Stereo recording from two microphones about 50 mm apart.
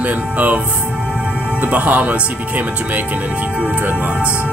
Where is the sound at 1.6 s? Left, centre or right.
Right.